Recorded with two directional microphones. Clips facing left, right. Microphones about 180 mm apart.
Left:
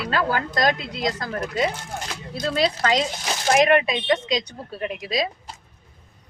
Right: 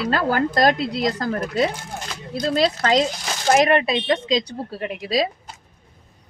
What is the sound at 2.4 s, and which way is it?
Speech, 35° right (ahead or behind).